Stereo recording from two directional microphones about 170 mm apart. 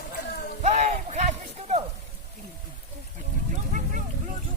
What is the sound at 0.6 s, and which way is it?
Music, 40° right (ahead or behind).